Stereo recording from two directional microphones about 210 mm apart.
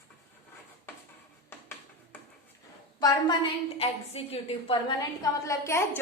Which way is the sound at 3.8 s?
25° left (ahead or behind).